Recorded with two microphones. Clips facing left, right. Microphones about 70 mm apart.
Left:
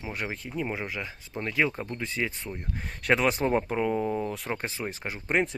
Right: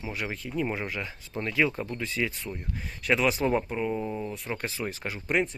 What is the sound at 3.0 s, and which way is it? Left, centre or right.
Speech, left.